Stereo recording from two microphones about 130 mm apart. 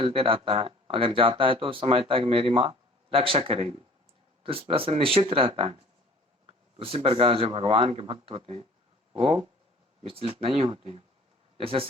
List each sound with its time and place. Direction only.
0.0 s speech: 45° right (ahead or behind)
6.8 s speech: 45° right (ahead or behind)